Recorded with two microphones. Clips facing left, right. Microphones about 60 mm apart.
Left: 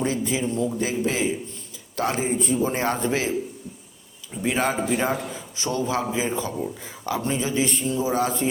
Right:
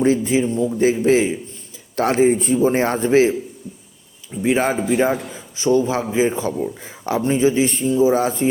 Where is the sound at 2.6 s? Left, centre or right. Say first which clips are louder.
Right 6 dB; right.